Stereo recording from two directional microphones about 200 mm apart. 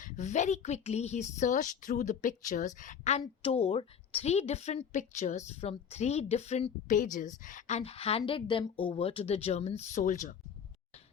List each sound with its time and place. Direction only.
0.0 s speech: 35° left (ahead or behind)